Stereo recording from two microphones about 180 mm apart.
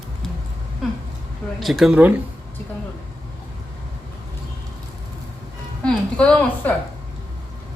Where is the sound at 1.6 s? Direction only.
Centre (ahead or behind).